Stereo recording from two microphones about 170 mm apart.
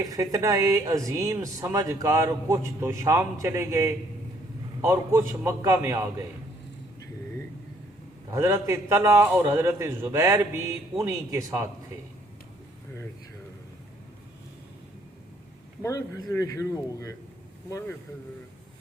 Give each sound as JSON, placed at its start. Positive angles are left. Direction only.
{"t": 0.0, "sound": "speech", "side_deg": -20}
{"t": 8.3, "sound": "speech", "side_deg": -15}
{"t": 15.8, "sound": "speech", "side_deg": 20}